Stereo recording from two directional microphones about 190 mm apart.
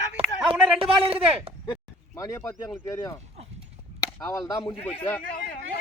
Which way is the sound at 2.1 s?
15° left (ahead or behind).